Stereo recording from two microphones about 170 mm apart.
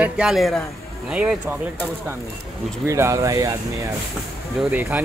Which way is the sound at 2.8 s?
15° right (ahead or behind).